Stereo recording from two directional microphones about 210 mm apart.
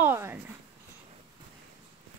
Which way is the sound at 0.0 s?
10° right (ahead or behind).